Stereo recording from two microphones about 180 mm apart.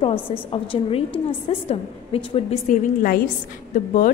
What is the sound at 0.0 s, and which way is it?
A woman's voice, 30° left (ahead or behind).